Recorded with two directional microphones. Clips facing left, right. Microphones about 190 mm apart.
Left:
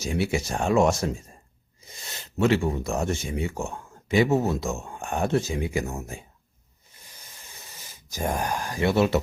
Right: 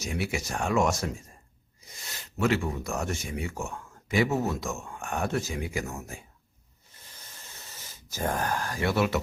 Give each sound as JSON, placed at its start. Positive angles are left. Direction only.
{"t": 0.0, "sound": "speech", "side_deg": 30}
{"t": 2.4, "sound": "speech", "side_deg": 30}
{"t": 7.0, "sound": "a sound", "side_deg": 15}